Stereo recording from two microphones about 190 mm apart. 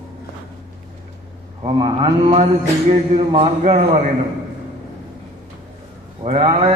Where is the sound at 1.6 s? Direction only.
25° right (ahead or behind).